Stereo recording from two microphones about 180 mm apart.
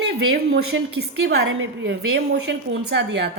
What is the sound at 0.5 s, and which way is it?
A woman's voice, 65° right (ahead or behind).